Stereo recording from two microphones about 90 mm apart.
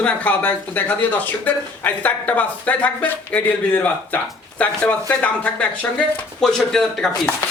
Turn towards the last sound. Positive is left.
turn(degrees=5)  # may be behind; listen again after turning